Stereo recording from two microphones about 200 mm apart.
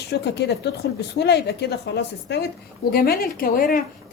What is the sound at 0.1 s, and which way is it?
A woman's voice, 55° left (ahead or behind).